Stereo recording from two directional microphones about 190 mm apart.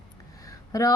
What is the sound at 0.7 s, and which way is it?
Speech, 20° left (ahead or behind).